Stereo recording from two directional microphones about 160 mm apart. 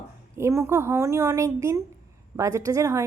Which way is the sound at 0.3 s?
15° right (ahead or behind).